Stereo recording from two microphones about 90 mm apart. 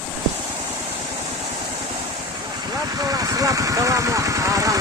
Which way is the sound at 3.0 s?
45° right (ahead or behind).